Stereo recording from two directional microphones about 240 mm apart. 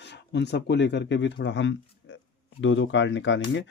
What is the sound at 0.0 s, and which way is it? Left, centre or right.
Speech, left.